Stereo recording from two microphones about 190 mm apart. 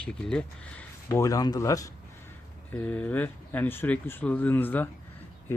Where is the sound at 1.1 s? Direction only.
15° left (ahead or behind).